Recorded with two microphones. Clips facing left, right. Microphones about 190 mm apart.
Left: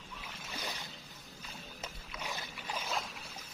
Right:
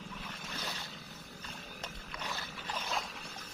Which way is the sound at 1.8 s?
10° left (ahead or behind).